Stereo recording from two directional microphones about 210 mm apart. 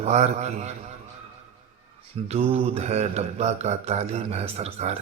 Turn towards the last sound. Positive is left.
turn(degrees=-30)  # may be behind; listen again after turning